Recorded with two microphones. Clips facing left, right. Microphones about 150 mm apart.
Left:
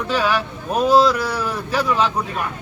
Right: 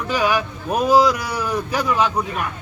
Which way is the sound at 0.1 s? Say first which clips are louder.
Right 1 dB; 15° right (ahead or behind).